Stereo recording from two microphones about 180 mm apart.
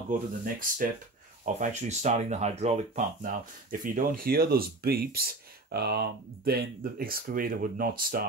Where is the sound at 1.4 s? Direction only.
40° right (ahead or behind).